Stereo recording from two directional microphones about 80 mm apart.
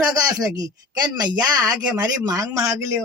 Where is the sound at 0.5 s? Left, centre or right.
Right.